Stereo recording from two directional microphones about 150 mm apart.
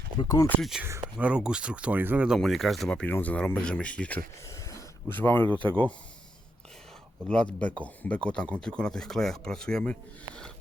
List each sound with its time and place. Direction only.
0.2 s speech: 25° left (ahead or behind)
0.6 s speech: 5° right (ahead or behind)
0.9 s speech: 20° right (ahead or behind)
1.3 s speech: 5° right (ahead or behind)
4.4 s a sound: 20° left (ahead or behind)
5.5 s speech: 35° right (ahead or behind)
7.3 s speech: 5° left (ahead or behind)